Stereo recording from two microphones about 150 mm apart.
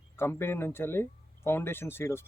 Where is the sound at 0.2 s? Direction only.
15° left (ahead or behind).